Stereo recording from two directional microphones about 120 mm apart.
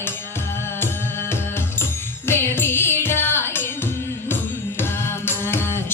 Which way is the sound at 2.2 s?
20° left (ahead or behind).